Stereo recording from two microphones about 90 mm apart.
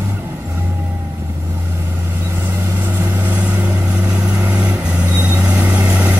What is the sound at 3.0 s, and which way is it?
Vehicle, 20° right (ahead or behind).